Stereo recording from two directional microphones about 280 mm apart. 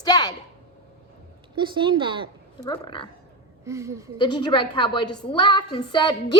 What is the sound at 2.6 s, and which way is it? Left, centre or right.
Speech, centre.